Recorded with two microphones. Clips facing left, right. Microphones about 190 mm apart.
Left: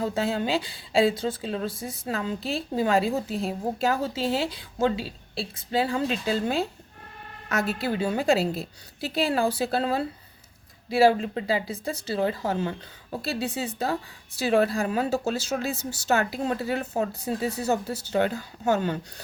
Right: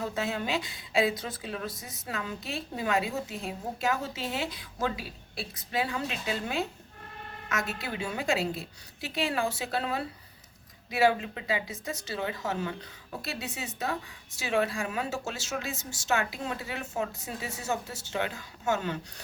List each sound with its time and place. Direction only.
0.0 s a woman's voice: 30° left (ahead or behind)